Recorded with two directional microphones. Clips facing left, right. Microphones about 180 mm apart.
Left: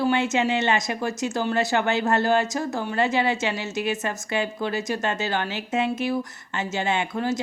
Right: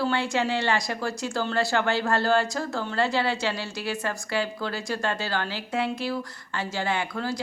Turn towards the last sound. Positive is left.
turn(degrees=20)  # may be behind; listen again after turning